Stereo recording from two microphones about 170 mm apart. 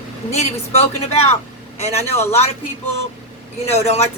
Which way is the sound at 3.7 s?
40° left (ahead or behind).